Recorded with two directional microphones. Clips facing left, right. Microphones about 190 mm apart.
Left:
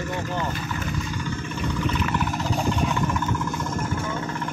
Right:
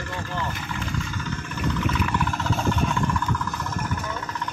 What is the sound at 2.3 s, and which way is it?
Vehicle, 15° left (ahead or behind).